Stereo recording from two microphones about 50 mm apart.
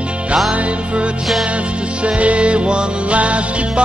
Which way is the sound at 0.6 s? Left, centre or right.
Right.